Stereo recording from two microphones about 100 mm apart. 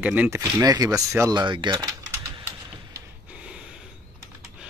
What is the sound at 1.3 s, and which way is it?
Speech, 50° right (ahead or behind).